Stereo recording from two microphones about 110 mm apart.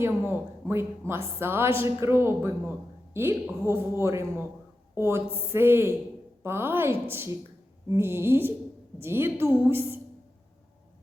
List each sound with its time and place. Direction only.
0.0 s a woman's voice: 20° right (ahead or behind)